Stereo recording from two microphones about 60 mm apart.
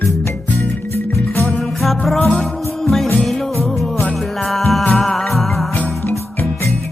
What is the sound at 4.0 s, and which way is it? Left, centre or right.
Music, left.